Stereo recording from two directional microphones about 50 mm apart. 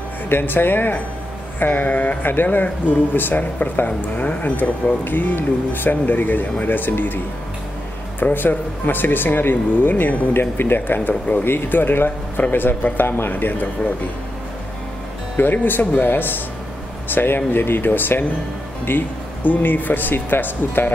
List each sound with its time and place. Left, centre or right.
0.3 s speech: left
8.2 s speech: left
15.3 s speech: left